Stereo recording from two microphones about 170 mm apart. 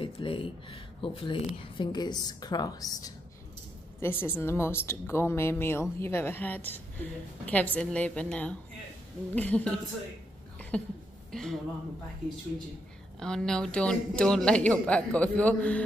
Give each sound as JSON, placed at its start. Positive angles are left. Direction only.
{"t": 0.0, "sound": "a woman's voice", "side_deg": 30}
{"t": 13.2, "sound": "speech", "side_deg": 5}